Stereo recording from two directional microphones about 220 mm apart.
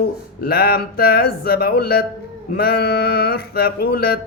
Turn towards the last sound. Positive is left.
turn(degrees=45)  # may be behind; listen again after turning